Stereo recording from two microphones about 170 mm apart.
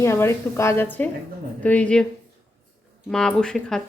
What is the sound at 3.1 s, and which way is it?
Speech, 5° left (ahead or behind).